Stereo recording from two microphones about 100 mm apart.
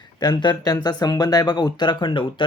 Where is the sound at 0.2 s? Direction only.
50° left (ahead or behind).